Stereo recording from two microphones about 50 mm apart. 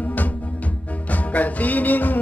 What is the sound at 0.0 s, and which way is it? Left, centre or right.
Music, left.